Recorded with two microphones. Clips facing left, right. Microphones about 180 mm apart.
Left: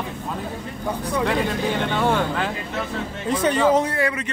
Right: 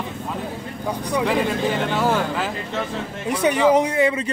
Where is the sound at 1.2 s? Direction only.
Centre (ahead or behind).